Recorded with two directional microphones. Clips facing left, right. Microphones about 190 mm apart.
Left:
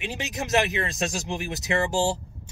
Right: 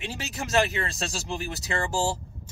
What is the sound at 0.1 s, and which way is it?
Speech, 20° left (ahead or behind).